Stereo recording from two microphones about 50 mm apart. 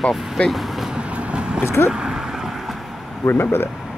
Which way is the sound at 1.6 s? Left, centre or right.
Left.